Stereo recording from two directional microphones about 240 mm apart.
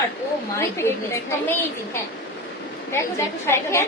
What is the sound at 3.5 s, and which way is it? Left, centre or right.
Speech, centre.